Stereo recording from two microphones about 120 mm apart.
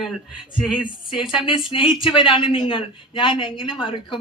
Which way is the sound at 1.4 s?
45° left (ahead or behind).